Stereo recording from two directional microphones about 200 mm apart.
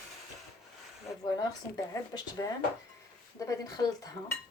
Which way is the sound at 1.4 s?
20° left (ahead or behind).